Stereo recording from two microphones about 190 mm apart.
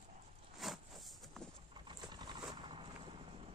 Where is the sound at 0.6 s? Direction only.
Centre (ahead or behind).